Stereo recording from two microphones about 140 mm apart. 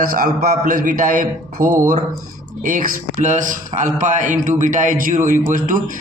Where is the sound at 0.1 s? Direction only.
90° right.